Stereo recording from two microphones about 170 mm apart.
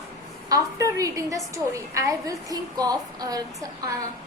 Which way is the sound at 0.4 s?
20° right (ahead or behind).